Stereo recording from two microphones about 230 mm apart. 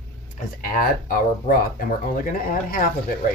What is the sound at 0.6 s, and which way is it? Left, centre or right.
Speech, left.